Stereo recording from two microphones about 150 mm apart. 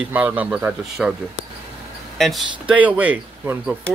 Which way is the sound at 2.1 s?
Centre (ahead or behind).